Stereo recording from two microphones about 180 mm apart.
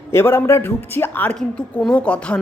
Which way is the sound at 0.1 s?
15° left (ahead or behind).